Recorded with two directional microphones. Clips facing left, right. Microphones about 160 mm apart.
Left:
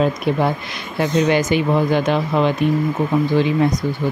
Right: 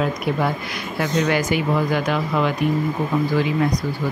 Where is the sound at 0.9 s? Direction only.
20° left (ahead or behind).